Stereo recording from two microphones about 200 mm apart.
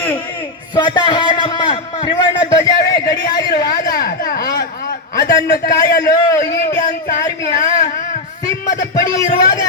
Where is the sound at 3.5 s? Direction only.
50° left (ahead or behind).